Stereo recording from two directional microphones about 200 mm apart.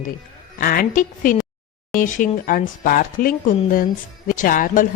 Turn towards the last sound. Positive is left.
turn(degrees=40)  # may be behind; listen again after turning